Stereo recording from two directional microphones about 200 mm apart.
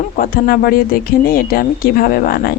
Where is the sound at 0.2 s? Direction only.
45° left (ahead or behind).